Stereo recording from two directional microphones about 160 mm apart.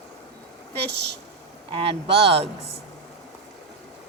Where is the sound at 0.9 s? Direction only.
90° right.